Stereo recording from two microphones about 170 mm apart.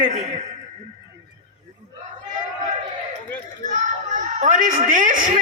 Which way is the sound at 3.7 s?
50° right (ahead or behind).